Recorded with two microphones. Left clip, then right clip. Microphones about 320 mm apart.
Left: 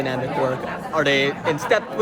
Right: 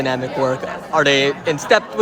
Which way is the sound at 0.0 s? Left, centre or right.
Right.